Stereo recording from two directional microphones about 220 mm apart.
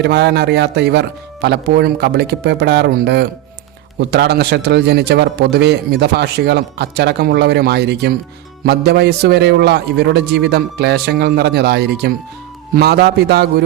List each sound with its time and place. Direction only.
0.0 s a man's voice: 50° right (ahead or behind)